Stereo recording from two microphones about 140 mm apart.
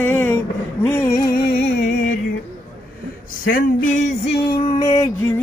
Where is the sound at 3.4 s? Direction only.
75° left (ahead or behind).